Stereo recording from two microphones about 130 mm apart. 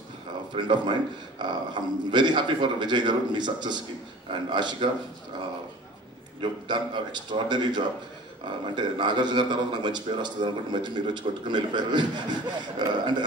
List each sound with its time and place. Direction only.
0.6 s a man's voice: 35° right (ahead or behind)
6.7 s a man's voice: 35° right (ahead or behind)